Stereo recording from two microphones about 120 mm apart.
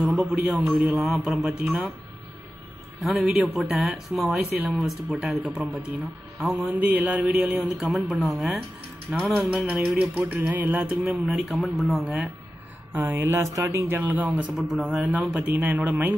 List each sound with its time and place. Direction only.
0.0 s a man's voice: 10° right (ahead or behind)
3.0 s a man's voice: 5° right (ahead or behind)
9.1 s speech: 15° right (ahead or behind)
12.9 s speech: 20° right (ahead or behind)
14.7 s speech: centre (ahead or behind)